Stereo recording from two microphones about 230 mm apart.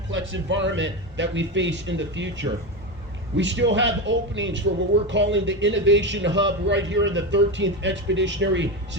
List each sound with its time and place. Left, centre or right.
0.1 s a man's voice: right